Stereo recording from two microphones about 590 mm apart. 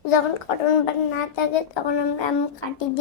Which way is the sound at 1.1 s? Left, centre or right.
Left.